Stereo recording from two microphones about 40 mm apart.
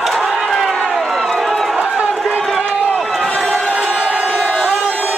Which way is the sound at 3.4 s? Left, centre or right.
Centre.